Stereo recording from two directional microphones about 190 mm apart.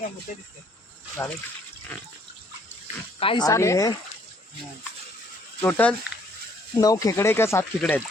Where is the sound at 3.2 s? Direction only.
25° left (ahead or behind).